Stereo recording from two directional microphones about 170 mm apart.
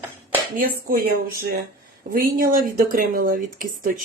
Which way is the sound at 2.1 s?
55° right (ahead or behind).